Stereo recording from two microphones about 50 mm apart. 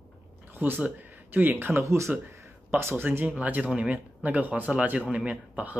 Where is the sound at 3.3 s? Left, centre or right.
Right.